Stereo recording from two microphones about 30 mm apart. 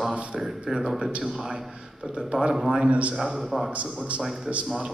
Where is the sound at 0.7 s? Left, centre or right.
Centre.